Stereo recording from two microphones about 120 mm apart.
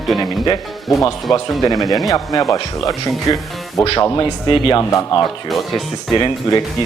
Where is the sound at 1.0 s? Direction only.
30° left (ahead or behind).